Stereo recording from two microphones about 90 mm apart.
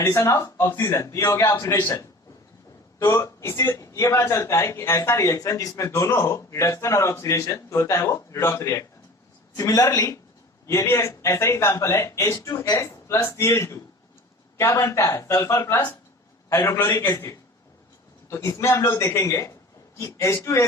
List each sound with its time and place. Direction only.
0.0 s a man's voice: 30° left (ahead or behind)